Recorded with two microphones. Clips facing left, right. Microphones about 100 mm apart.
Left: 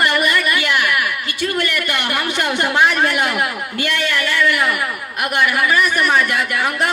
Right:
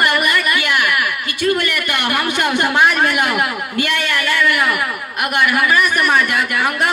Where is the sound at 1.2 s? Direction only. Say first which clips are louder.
Right 3 dB; 55° right (ahead or behind).